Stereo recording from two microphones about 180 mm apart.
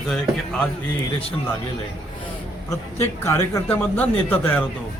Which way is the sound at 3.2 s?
15° left (ahead or behind).